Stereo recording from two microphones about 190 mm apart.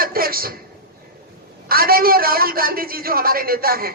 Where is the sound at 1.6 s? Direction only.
50° right (ahead or behind).